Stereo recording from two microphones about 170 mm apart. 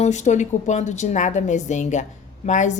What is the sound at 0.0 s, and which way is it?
A woman's voice, 45° left (ahead or behind).